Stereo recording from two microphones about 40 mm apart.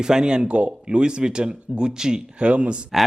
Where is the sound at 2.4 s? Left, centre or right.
Right.